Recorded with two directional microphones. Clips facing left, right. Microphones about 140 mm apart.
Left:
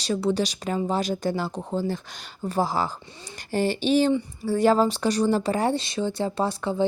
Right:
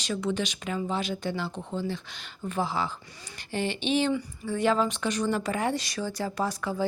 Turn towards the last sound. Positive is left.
turn(degrees=25)  # may be behind; listen again after turning